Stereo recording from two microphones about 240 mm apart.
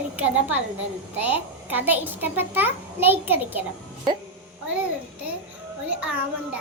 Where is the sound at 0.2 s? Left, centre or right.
Centre.